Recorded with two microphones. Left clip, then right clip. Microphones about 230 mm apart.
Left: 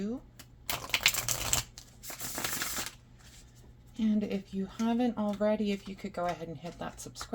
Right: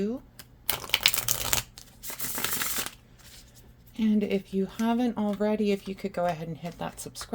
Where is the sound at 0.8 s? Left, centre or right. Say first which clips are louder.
Right 3 dB; right.